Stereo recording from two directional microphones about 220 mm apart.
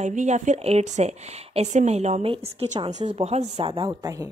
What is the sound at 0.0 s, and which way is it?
Speech, 35° right (ahead or behind).